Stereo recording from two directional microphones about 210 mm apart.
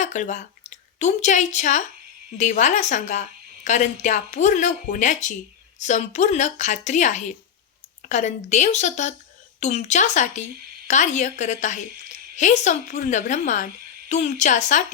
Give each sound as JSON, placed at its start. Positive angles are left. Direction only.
{"t": 0.0, "sound": "a woman's voice", "side_deg": 35}